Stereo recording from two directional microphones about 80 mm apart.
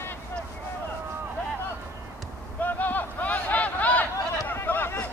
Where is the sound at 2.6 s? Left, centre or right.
Left.